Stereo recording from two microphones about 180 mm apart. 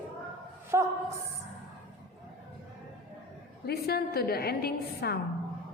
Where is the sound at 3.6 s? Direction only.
60° left (ahead or behind).